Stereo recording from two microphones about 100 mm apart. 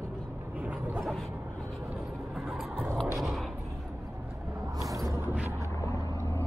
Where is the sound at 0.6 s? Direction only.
15° right (ahead or behind).